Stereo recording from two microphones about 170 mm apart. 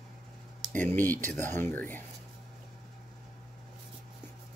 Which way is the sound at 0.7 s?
10° left (ahead or behind).